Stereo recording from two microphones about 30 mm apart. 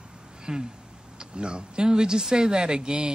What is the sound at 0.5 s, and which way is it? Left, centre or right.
Speech, right.